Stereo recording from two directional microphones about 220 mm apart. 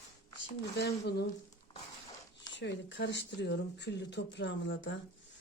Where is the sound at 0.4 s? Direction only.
45° left (ahead or behind).